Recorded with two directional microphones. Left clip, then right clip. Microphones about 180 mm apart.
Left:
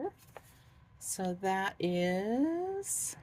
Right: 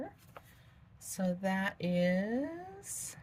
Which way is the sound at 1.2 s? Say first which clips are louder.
Left 2 dB; 60° left (ahead or behind).